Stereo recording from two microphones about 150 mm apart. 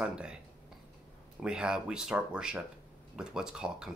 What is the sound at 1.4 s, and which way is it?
Speech, 5° right (ahead or behind).